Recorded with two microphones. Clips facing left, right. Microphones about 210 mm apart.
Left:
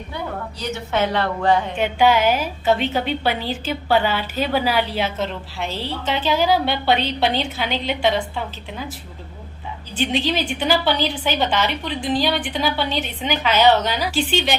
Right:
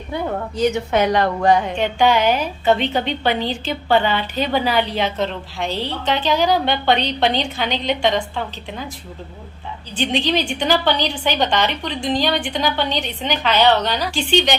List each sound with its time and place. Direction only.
0.5 s a woman's voice: 15° right (ahead or behind)
1.7 s a woman's voice: 5° left (ahead or behind)
9.9 s a woman's voice: 5° left (ahead or behind)